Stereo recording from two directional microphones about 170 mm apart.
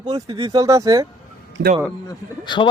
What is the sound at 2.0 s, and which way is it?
Speech, 25° left (ahead or behind).